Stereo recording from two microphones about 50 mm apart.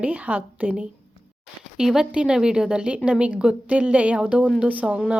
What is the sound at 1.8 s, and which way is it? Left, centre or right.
A woman's voice, centre.